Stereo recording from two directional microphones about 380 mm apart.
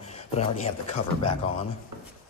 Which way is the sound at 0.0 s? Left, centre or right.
Centre.